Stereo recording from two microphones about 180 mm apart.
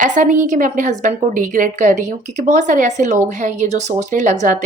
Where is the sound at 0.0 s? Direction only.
45° right (ahead or behind).